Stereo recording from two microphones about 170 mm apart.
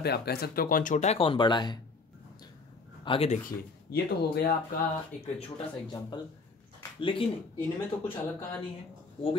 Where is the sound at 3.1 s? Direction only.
35° left (ahead or behind).